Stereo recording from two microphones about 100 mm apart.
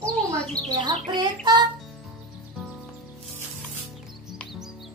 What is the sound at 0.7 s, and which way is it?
Child singing, 45° right (ahead or behind).